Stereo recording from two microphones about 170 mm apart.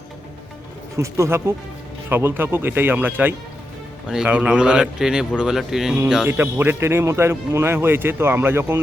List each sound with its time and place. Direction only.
0.9 s speech: 15° right (ahead or behind)